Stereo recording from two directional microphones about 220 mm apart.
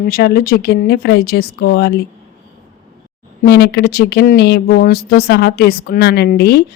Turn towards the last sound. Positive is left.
turn(degrees=45)  # may be behind; listen again after turning